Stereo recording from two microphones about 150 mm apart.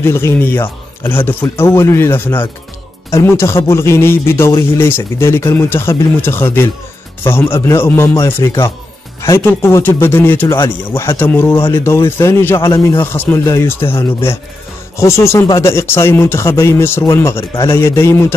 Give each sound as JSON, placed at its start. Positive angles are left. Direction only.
{"t": 0.0, "sound": "a man's voice", "side_deg": 15}
{"t": 15.0, "sound": "speech", "side_deg": 20}